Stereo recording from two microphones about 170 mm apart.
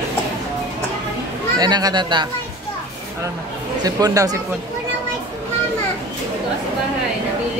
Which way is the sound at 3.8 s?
20° right (ahead or behind).